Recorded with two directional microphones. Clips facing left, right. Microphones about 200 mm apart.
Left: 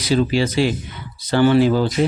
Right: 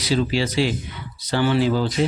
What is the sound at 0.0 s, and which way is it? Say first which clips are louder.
Speech: left 4 dB; 50° left (ahead or behind).